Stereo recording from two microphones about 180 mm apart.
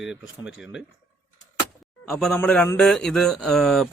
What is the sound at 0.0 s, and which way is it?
Speech, 5° right (ahead or behind).